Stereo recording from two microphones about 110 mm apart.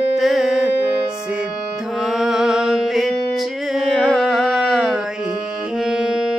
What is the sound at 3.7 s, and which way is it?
Carnatic music, centre (ahead or behind).